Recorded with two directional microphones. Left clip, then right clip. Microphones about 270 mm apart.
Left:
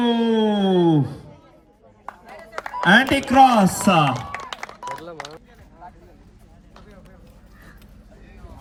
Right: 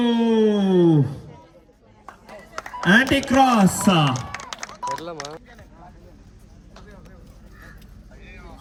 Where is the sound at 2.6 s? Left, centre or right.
Left.